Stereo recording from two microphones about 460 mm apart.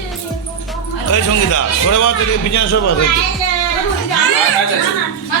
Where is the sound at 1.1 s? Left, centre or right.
Left.